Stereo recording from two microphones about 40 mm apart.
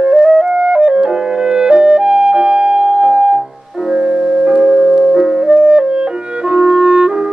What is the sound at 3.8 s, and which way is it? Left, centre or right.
Music, centre.